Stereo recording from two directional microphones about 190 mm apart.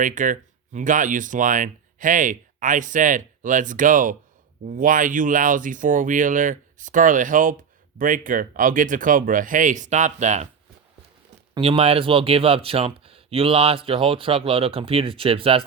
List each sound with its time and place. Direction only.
0.0 s speech: 45° right (ahead or behind)
11.5 s speech: 30° right (ahead or behind)